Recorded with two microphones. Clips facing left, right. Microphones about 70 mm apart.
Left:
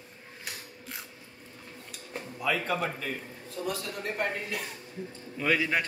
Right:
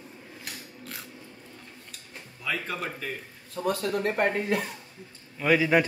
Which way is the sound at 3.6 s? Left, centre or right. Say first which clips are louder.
Right 8 dB; right.